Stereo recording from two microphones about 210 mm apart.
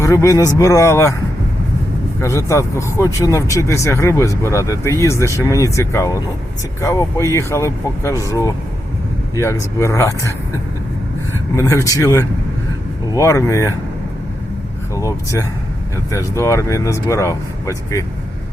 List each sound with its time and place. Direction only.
0.0 s speech: 15° left (ahead or behind)
2.2 s speech: 15° left (ahead or behind)
11.5 s speech: 15° left (ahead or behind)
14.9 s speech: 15° left (ahead or behind)